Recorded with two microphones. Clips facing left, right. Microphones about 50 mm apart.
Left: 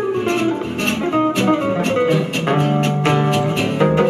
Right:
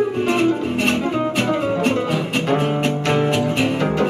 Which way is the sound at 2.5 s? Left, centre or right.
Centre.